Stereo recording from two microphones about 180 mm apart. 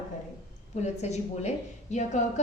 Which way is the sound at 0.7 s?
40° left (ahead or behind).